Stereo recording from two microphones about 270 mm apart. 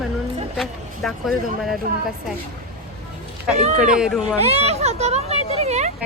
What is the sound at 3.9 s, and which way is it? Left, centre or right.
Speech, centre.